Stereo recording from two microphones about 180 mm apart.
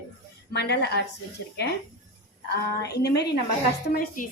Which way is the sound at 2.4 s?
65° left (ahead or behind).